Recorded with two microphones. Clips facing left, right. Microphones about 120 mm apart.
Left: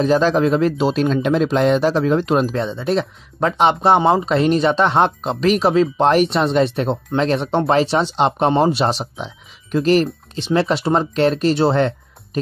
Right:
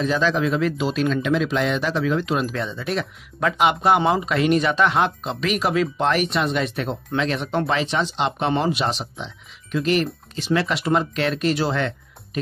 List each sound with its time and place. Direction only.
0.0 s speech: 40° left (ahead or behind)